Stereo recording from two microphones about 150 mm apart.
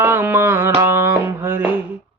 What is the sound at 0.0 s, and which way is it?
Music, 15° right (ahead or behind).